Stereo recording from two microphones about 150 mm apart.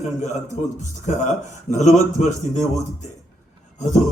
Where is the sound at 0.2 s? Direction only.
50° left (ahead or behind).